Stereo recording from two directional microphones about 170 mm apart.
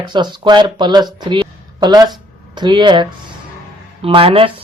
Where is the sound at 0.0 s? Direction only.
25° right (ahead or behind).